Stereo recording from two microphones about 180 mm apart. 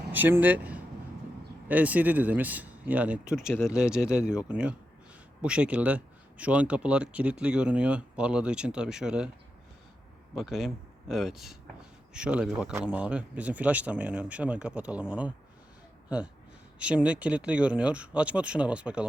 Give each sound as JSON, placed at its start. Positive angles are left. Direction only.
{"t": 0.1, "sound": "speech", "side_deg": -10}
{"t": 10.3, "sound": "speech", "side_deg": 0}